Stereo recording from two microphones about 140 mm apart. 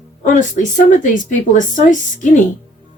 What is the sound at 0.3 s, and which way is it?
Music, 65° left (ahead or behind).